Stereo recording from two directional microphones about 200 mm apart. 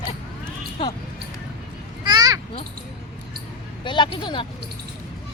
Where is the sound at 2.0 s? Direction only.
20° right (ahead or behind).